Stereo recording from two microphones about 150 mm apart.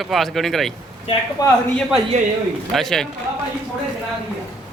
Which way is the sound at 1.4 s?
25° left (ahead or behind).